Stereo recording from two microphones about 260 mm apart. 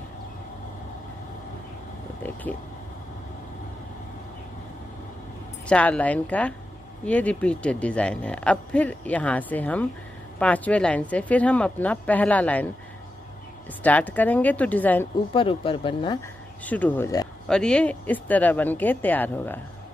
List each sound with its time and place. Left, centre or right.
5.7 s speech: centre
13.8 s speech: centre
15.3 s speech: centre
16.6 s speech: centre